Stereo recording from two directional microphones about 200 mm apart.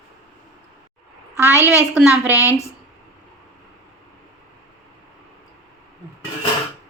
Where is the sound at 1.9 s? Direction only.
5° right (ahead or behind).